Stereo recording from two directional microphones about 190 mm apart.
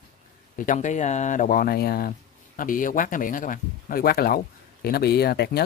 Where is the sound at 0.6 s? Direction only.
40° left (ahead or behind).